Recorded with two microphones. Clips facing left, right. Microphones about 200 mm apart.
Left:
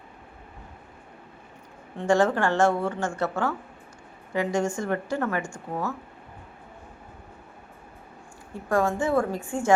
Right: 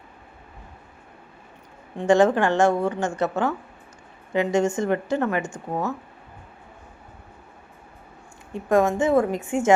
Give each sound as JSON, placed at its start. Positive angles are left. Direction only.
{"t": 2.0, "sound": "a woman's voice", "side_deg": -20}
{"t": 8.5, "sound": "a woman's voice", "side_deg": -20}